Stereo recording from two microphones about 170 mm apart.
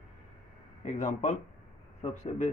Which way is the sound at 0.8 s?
45° left (ahead or behind).